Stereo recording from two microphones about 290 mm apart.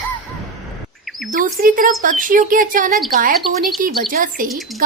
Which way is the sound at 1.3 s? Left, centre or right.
Right.